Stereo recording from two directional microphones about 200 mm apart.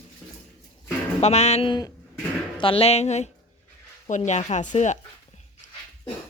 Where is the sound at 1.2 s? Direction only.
35° left (ahead or behind).